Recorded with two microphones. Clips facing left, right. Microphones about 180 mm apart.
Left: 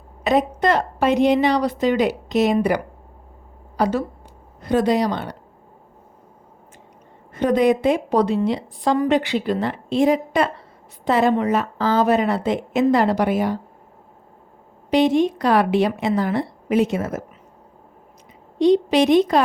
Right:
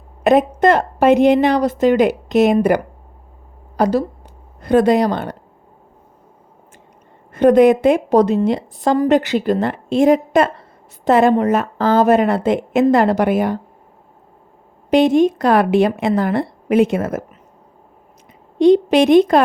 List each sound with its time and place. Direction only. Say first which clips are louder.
0.3 s a woman's voice: right 6 dB; 50° right (ahead or behind)
4.6 s a woman's voice: right 5 dB; 55° right (ahead or behind)
7.3 s a woman's voice: right 7 dB; 55° right (ahead or behind)
14.8 s a woman's voice: right 4 dB; 50° right (ahead or behind)
18.6 s a woman's voice: right 4 dB; 55° right (ahead or behind)